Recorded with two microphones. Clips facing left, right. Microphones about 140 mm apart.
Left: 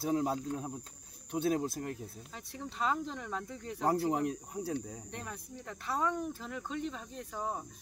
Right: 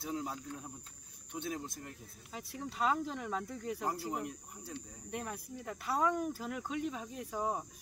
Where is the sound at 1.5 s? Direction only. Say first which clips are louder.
Left 9 dB; 60° left (ahead or behind).